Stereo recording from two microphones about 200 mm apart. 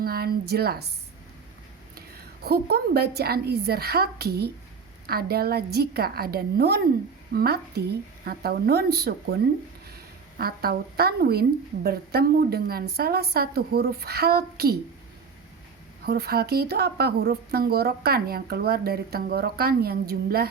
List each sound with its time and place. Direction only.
0.0 s a woman's voice: 50° right (ahead or behind)
2.0 s a sound: 50° right (ahead or behind)
3.2 s a woman's voice: 50° right (ahead or behind)
10.3 s a woman's voice: 50° right (ahead or behind)
16.0 s a woman's voice: 50° right (ahead or behind)